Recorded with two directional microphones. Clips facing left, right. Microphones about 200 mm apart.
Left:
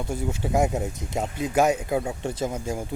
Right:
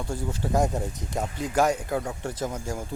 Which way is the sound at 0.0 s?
20° left (ahead or behind).